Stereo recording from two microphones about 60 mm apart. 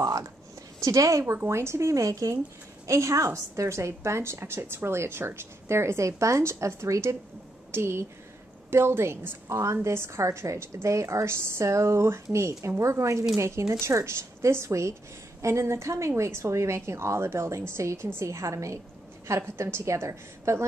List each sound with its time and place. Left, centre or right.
0.0 s a sound: right
0.7 s a woman's voice: right
1.2 s a woman's voice: right
2.9 s a woman's voice: right
9.5 s a woman's voice: right
19.2 s a woman's voice: right